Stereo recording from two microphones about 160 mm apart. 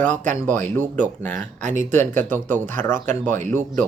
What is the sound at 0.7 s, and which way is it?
Speech, 10° left (ahead or behind).